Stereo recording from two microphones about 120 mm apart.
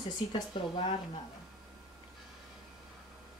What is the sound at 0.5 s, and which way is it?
Speech, 40° left (ahead or behind).